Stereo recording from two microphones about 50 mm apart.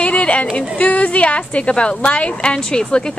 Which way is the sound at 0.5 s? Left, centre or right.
Left.